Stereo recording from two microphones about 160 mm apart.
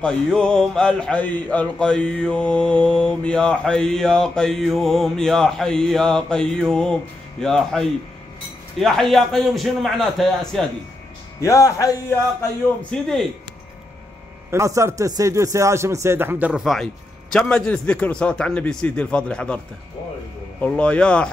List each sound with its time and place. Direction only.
0.0 s speech: 5° left (ahead or behind)
11.4 s speech: 20° left (ahead or behind)
12.9 s speech: centre (ahead or behind)
14.5 s speech: 20° right (ahead or behind); by 19.6 s 5° left (ahead or behind)
20.6 s speech: 10° left (ahead or behind)